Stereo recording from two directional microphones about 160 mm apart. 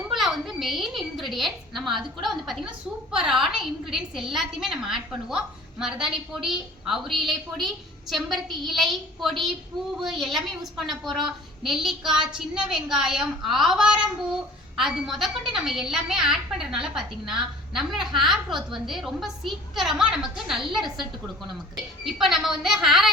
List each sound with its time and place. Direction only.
0.0 s a sound: centre (ahead or behind)
2.2 s a woman's voice: centre (ahead or behind)
22.0 s a woman's voice: centre (ahead or behind)